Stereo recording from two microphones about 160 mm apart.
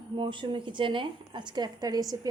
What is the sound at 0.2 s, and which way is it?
A woman's voice, 30° right (ahead or behind).